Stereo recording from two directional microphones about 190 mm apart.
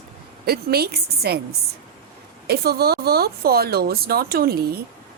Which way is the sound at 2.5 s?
55° right (ahead or behind).